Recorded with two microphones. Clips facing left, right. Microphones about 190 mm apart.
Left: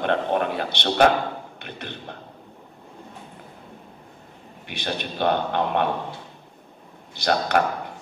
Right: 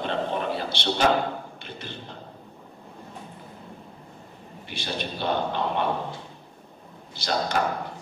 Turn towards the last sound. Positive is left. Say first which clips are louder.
# left 4 dB
turn(degrees=60)  # may be behind; listen again after turning